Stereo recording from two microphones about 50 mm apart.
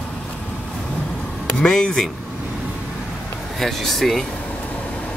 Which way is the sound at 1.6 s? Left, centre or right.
Centre.